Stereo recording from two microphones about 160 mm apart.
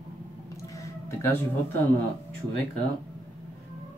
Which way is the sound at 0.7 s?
15° left (ahead or behind).